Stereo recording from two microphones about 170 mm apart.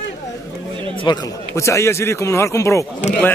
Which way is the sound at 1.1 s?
25° left (ahead or behind).